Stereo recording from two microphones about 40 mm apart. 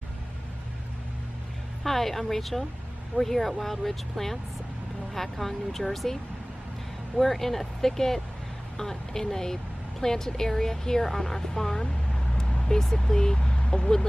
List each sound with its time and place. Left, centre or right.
1.8 s a woman's voice: centre
7.2 s a woman's voice: centre
12.4 s vehicle: centre